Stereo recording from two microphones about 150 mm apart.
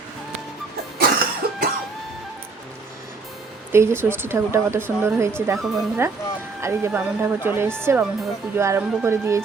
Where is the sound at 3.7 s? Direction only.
15° right (ahead or behind).